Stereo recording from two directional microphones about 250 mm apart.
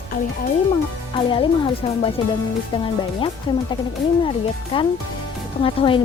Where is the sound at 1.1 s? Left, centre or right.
Centre.